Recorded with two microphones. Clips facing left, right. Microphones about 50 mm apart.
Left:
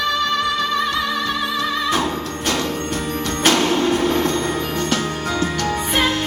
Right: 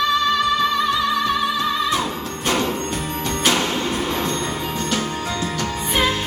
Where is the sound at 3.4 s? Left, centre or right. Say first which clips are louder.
Left 5 dB; left.